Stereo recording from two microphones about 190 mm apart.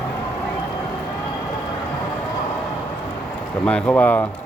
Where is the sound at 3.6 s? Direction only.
5° left (ahead or behind).